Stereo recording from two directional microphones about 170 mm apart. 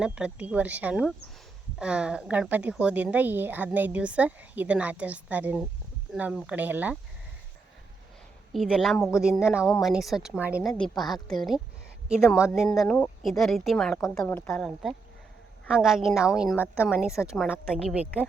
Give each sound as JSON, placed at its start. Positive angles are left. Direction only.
{"t": 0.0, "sound": "a woman's voice", "side_deg": -5}
{"t": 8.5, "sound": "a woman's voice", "side_deg": 0}